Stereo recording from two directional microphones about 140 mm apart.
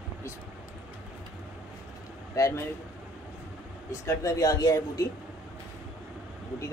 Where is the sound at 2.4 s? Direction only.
20° left (ahead or behind).